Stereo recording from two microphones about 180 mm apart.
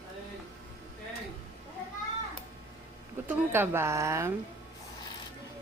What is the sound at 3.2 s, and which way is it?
A woman's voice, 10° right (ahead or behind).